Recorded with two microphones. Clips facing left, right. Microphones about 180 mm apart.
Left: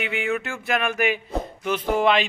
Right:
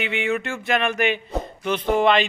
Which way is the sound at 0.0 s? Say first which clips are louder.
Right 2 dB; centre (ahead or behind).